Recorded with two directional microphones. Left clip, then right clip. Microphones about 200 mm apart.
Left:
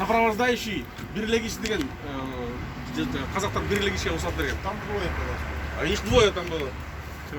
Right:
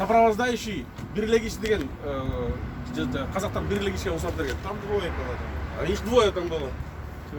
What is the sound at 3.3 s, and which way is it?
Speech, 60° right (ahead or behind).